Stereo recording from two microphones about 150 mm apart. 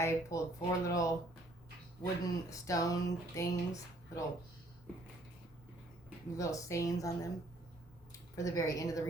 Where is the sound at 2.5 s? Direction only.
25° left (ahead or behind).